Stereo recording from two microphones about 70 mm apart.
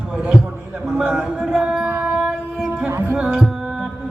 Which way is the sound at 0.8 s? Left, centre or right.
Centre.